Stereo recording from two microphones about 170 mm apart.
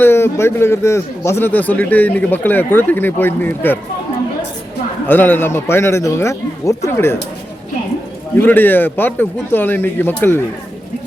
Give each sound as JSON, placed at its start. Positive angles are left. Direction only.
{"t": 0.0, "sound": "a man's voice", "side_deg": 15}
{"t": 5.0, "sound": "a man's voice", "side_deg": 10}
{"t": 8.4, "sound": "a man's voice", "side_deg": 10}